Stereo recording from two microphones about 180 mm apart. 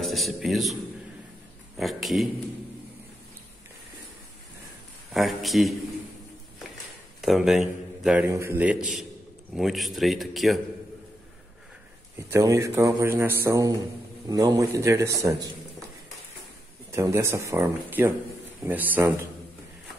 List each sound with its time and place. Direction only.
0.0 s a man's voice: centre (ahead or behind)
1.8 s a man's voice: centre (ahead or behind)
5.1 s a man's voice: centre (ahead or behind)
7.2 s a man's voice: centre (ahead or behind)
12.2 s a man's voice: 15° right (ahead or behind)
16.9 s a man's voice: 15° right (ahead or behind)